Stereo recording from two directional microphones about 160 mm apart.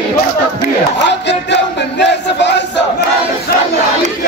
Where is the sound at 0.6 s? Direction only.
90° left.